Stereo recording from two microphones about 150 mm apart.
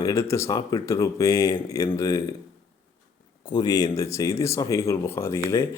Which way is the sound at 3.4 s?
30° left (ahead or behind).